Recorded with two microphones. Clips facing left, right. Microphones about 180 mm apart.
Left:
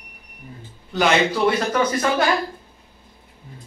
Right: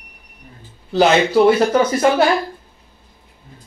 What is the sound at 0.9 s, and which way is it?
Speech, 30° right (ahead or behind).